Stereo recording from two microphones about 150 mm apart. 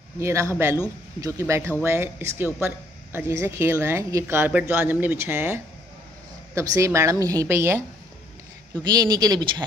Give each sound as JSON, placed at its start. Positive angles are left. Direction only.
{"t": 0.2, "sound": "a woman's voice", "side_deg": -20}
{"t": 8.8, "sound": "a woman's voice", "side_deg": -25}